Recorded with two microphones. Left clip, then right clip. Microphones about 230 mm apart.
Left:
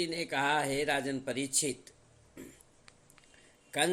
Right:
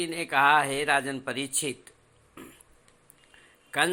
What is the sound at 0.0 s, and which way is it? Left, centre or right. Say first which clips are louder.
A man's voice: right 8 dB; centre.